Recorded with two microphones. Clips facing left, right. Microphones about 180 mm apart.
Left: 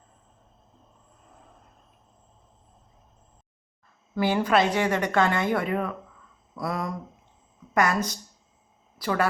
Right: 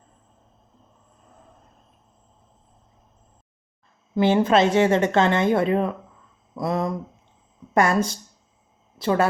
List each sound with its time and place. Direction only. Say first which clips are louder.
4.1 s speech: right 5 dB; 25° right (ahead or behind)